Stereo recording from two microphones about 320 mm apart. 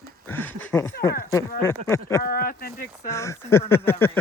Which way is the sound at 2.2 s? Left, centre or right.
Left.